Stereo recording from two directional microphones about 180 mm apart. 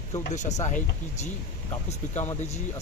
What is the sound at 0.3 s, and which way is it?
Speech, 40° left (ahead or behind).